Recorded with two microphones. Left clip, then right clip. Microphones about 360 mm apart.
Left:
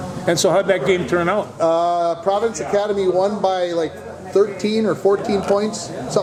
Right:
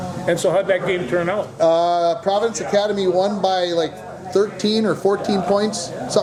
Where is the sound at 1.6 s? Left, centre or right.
Centre.